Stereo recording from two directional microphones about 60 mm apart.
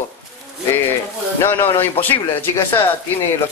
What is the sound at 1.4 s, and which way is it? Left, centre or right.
Speech, left.